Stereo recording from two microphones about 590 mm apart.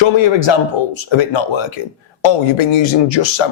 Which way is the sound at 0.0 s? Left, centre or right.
Left.